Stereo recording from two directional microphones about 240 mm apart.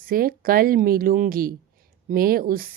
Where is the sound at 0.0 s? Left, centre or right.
Right.